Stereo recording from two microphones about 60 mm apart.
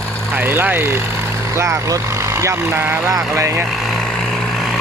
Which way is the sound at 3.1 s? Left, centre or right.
Right.